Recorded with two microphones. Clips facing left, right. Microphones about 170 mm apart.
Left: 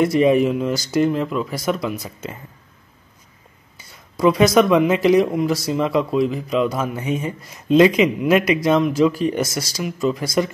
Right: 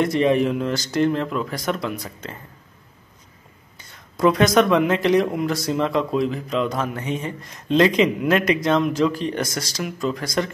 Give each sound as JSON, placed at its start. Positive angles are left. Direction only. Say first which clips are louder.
{"t": 0.0, "sound": "speech", "louder": "left 3 dB", "side_deg": 5}
{"t": 3.9, "sound": "speech", "louder": "left 1 dB", "side_deg": 5}